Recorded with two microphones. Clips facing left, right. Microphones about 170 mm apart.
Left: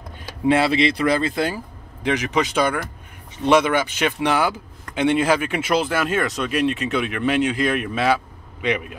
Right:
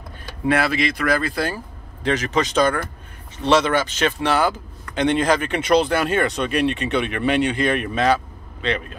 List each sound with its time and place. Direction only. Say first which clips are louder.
0.5 s speech: left 3 dB; 25° left (ahead or behind)